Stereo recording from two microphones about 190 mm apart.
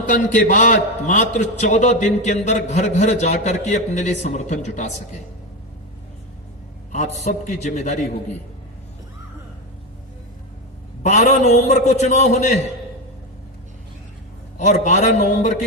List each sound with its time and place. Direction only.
0.1 s a man's voice: 45° left (ahead or behind)
6.9 s a man's voice: 40° left (ahead or behind)
11.0 s a man's voice: 40° left (ahead or behind)
14.6 s a man's voice: 40° left (ahead or behind)